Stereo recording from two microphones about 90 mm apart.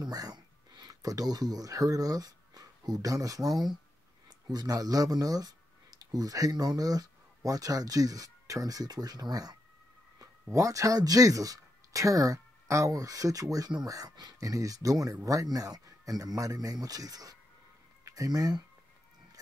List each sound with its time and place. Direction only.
0.0 s speech: 50° right (ahead or behind)